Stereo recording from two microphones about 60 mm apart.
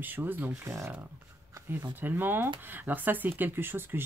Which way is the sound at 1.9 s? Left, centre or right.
Right.